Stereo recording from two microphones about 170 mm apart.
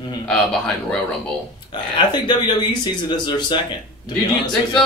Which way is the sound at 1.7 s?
25° left (ahead or behind).